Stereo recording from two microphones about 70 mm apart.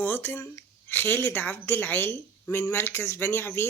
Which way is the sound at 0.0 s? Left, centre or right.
Left.